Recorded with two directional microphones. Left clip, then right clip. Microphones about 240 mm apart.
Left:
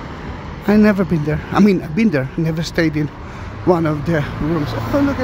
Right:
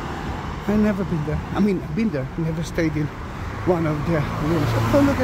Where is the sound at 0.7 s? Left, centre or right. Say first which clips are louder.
Left 8 dB; centre.